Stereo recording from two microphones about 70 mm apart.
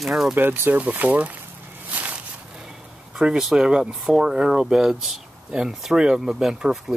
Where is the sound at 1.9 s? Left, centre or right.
Right.